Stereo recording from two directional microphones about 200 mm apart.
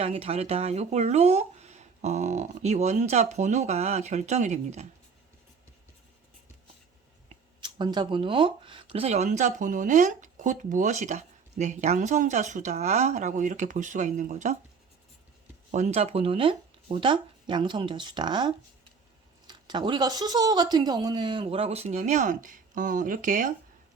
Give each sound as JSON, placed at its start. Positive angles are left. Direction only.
{"t": 0.0, "sound": "speech", "side_deg": -30}
{"t": 7.6, "sound": "speech", "side_deg": -20}
{"t": 15.7, "sound": "speech", "side_deg": -35}